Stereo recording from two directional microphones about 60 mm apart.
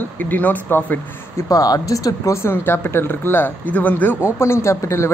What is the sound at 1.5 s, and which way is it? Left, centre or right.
Speech, left.